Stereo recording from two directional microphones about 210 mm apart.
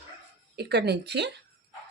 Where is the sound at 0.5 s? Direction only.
50° right (ahead or behind).